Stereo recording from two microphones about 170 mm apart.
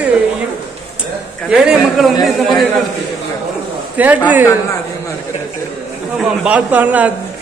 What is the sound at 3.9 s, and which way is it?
Speech, 10° right (ahead or behind).